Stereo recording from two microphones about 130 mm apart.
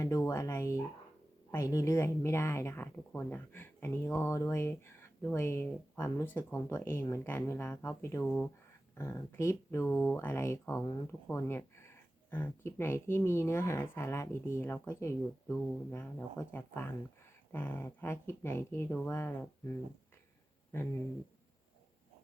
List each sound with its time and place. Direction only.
0.0 s speech: 25° left (ahead or behind)
8.2 s speech: 10° left (ahead or behind)
9.0 s speech: 20° left (ahead or behind)